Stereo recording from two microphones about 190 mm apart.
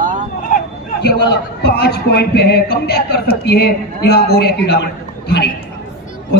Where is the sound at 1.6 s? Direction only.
55° left (ahead or behind).